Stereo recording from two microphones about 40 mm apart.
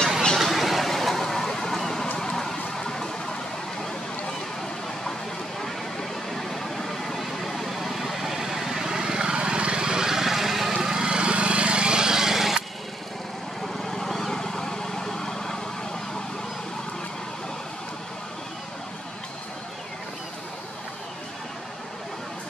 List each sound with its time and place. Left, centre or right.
0.4 s a sound: centre
5.6 s vehicle: centre
10.7 s vehicle: centre
13.7 s vehicle: centre